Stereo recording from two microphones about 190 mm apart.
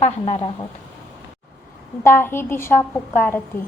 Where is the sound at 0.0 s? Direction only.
35° left (ahead or behind).